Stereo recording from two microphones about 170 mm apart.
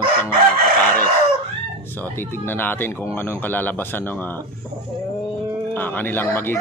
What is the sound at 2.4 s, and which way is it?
Speech, 10° left (ahead or behind).